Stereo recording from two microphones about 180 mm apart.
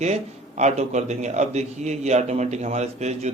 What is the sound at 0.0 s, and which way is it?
A man's voice, 40° right (ahead or behind).